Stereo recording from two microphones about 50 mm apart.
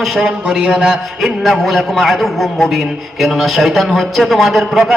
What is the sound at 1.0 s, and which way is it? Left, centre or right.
A man's voice, centre.